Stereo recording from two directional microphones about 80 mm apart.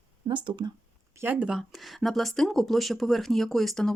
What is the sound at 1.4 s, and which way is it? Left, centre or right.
Speech, centre.